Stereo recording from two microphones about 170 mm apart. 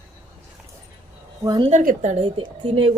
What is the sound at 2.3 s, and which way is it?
Speech, 30° right (ahead or behind).